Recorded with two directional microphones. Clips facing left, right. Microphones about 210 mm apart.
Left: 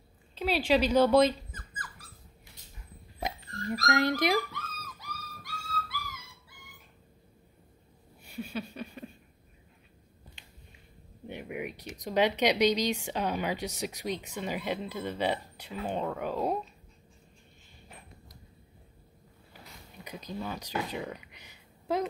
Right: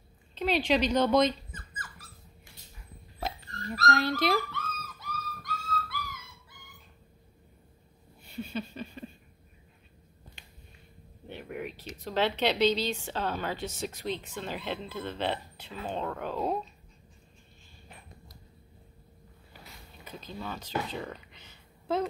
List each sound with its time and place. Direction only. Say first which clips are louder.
0.4 s speech: even; 5° left (ahead or behind)
1.5 s a sound: even; 25° right (ahead or behind)
3.2 s speech: left 1 dB; 15° left (ahead or behind)
5.4 s dog: right 3 dB; 10° left (ahead or behind)
8.3 s a sound: right 1 dB; 10° left (ahead or behind)
11.2 s speech: left 1 dB; 10° left (ahead or behind)
20.1 s speech: left 2 dB; 15° left (ahead or behind)